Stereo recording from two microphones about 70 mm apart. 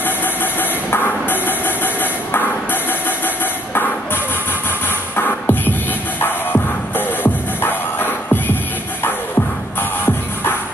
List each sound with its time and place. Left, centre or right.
0.0 s music: left
4.8 s music: left
9.8 s music: left